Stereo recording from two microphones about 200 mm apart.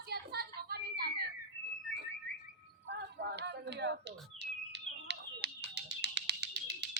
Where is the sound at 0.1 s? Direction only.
50° right (ahead or behind).